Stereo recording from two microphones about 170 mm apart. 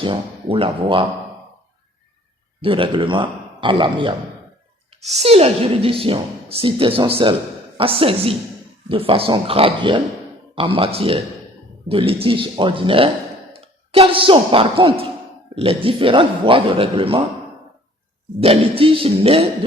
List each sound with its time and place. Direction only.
0.0 s a woman's voice: 30° right (ahead or behind)
2.6 s a man's voice: 30° right (ahead or behind)
18.3 s a woman's voice: 35° right (ahead or behind)